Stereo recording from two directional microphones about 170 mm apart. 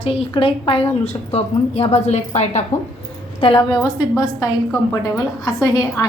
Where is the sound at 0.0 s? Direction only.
35° left (ahead or behind).